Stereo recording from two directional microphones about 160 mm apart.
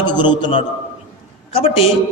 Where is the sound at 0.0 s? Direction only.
30° left (ahead or behind).